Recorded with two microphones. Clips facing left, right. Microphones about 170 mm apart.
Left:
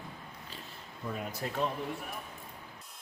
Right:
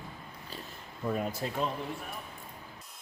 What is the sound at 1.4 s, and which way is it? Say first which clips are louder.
Speech: right 2 dB; 25° right (ahead or behind).